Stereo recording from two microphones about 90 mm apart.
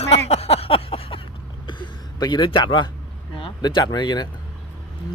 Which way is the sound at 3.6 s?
45° left (ahead or behind).